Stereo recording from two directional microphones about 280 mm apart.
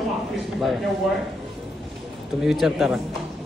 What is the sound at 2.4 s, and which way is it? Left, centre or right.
Speech, centre.